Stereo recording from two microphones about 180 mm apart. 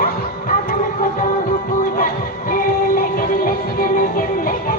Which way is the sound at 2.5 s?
50° left (ahead or behind).